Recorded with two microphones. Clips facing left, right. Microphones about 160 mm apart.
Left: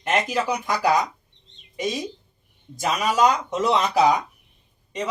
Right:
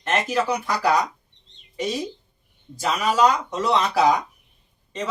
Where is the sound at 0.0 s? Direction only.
10° left (ahead or behind).